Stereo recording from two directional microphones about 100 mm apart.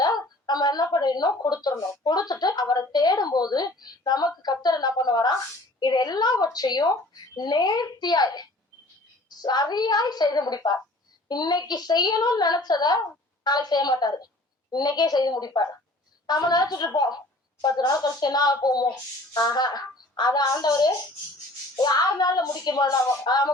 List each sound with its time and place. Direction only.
0.0 s a woman's voice: 40° left (ahead or behind)